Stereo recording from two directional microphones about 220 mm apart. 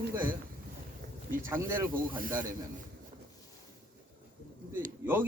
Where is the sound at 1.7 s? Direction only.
10° right (ahead or behind).